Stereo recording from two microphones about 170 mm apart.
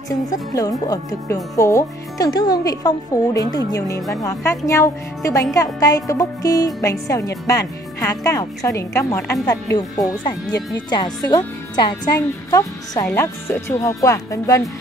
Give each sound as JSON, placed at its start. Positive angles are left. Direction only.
{"t": 0.3, "sound": "speech", "side_deg": 20}